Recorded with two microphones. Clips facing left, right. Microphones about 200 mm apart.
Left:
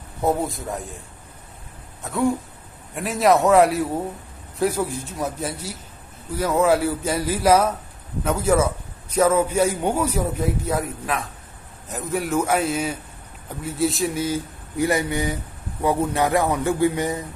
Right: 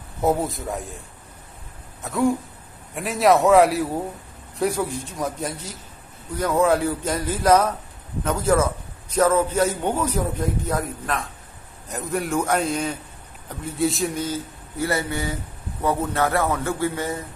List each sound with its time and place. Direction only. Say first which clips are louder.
0.2 s a man's voice: right 1 dB; centre (ahead or behind)
2.0 s a man's voice: right 1 dB; centre (ahead or behind); by 17.2 s 15° left (ahead or behind)